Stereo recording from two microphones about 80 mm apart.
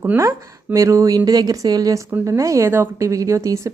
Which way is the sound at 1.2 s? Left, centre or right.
Right.